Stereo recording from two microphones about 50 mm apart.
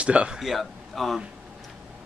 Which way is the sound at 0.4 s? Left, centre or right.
Centre.